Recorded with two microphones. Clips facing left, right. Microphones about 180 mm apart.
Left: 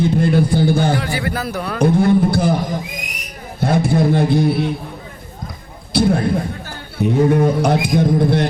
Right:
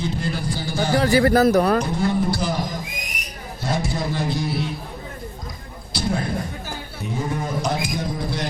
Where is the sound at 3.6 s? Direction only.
55° left (ahead or behind).